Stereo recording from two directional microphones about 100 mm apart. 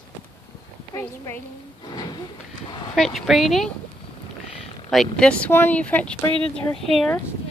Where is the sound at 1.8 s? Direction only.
45° left (ahead or behind).